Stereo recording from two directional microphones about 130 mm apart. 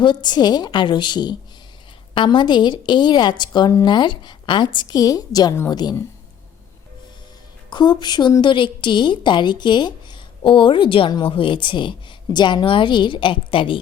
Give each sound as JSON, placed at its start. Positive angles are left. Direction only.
{"t": 0.0, "sound": "a woman's voice", "side_deg": 35}
{"t": 7.7, "sound": "a woman's voice", "side_deg": 35}